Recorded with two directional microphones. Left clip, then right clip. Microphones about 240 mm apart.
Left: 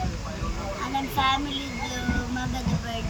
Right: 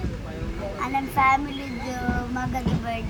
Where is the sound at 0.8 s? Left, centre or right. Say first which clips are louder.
Right 4 dB; centre.